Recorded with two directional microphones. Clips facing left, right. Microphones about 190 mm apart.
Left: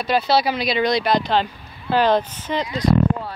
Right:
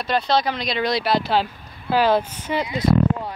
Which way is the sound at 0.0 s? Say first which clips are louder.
Left 2 dB; 5° left (ahead or behind).